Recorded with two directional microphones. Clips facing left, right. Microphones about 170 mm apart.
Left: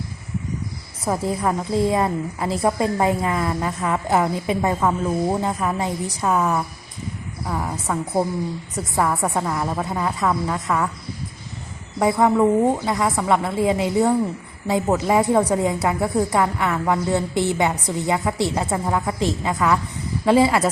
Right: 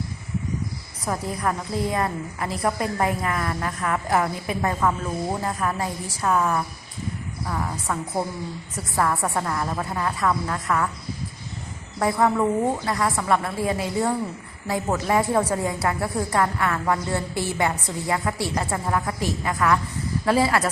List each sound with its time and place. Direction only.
1.0 s a woman's voice: 25° left (ahead or behind)
9.0 s a woman's voice: 20° left (ahead or behind)
11.9 s a woman's voice: 15° left (ahead or behind)